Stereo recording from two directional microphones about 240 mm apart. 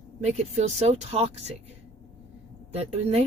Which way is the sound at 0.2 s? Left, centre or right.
Right.